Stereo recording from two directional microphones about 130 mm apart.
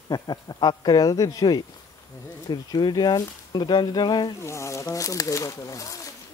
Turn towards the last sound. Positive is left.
turn(degrees=25)  # may be behind; listen again after turning